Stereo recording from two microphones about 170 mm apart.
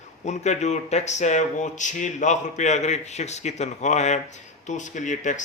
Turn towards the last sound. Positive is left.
turn(degrees=45)  # may be behind; listen again after turning